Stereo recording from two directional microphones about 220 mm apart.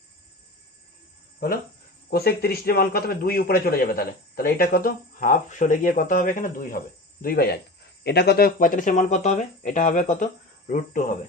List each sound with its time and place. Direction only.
2.0 s a man's voice: 45° left (ahead or behind)